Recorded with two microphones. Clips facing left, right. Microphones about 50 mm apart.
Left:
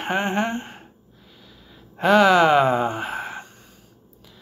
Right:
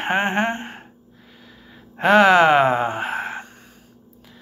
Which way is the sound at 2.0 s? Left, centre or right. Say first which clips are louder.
Right 2 dB; right.